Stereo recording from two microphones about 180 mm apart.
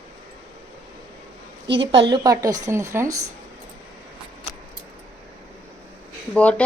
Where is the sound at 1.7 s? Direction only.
30° right (ahead or behind).